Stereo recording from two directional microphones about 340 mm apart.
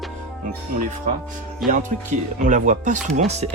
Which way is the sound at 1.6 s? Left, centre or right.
Centre.